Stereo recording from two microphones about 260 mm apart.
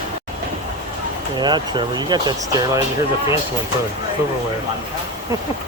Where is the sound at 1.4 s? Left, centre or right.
Centre.